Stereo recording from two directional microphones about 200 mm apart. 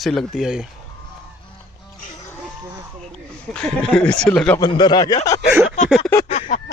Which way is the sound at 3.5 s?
5° left (ahead or behind).